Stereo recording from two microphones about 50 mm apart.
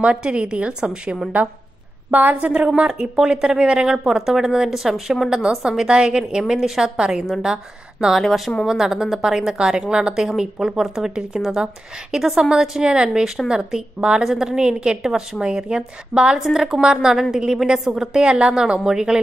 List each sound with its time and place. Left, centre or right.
0.0 s a woman's voice: right
2.9 s a woman's voice: centre
5.3 s a woman's voice: centre
8.2 s speech: centre
8.6 s a woman's voice: centre
16.3 s speech: centre
16.8 s a woman's voice: centre